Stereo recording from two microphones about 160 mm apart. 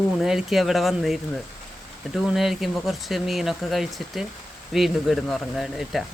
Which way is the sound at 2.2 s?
Centre (ahead or behind).